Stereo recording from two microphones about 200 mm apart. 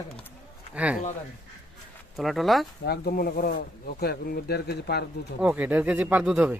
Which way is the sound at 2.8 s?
50° left (ahead or behind).